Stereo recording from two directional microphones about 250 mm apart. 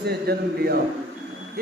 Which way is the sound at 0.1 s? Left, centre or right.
Right.